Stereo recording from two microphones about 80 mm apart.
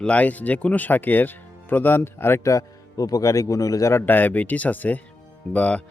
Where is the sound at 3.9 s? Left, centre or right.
Left.